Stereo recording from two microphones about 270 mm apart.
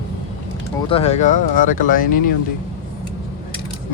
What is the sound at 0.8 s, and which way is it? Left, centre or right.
Speech, left.